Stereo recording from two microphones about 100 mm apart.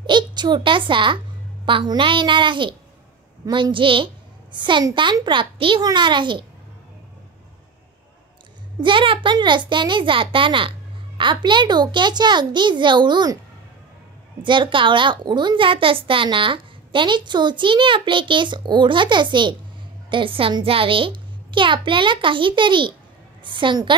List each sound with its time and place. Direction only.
0.0 s a child's voice: 50° right (ahead or behind)
5.8 s a child's voice: 45° right (ahead or behind)
8.8 s a child's voice: 55° right (ahead or behind)
14.4 s a child's voice: 55° right (ahead or behind)